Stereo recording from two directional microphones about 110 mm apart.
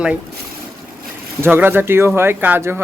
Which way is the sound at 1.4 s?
20° right (ahead or behind).